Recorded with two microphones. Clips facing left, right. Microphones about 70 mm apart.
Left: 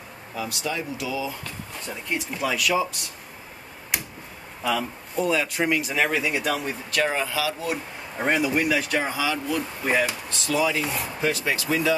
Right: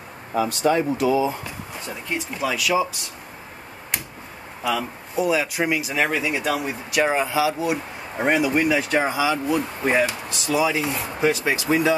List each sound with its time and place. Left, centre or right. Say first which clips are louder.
0.3 s speech: right 10 dB; right
1.8 s speech: right 1 dB; centre
4.6 s speech: right 1 dB; centre; by 11.9 s right